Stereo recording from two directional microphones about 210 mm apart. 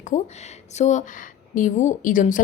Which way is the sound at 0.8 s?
35° left (ahead or behind).